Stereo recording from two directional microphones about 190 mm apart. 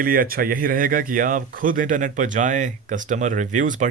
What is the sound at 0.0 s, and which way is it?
Speech, 50° right (ahead or behind).